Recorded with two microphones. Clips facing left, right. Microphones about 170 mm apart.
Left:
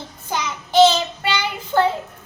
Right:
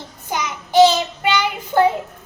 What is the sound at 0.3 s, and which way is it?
Child singing, 15° right (ahead or behind).